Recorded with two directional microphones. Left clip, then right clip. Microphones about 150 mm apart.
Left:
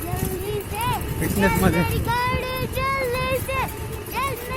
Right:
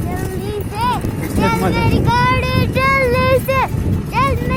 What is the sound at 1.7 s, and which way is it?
Vehicle, 60° right (ahead or behind).